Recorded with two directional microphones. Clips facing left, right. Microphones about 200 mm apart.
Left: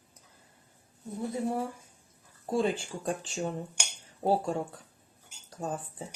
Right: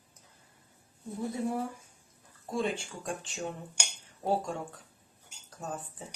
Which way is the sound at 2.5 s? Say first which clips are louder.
Left 4 dB; 35° left (ahead or behind).